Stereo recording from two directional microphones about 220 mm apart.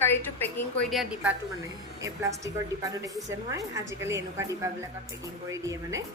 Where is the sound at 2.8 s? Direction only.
15° right (ahead or behind).